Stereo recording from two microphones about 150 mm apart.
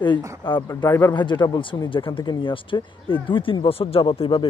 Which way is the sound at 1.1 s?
30° left (ahead or behind).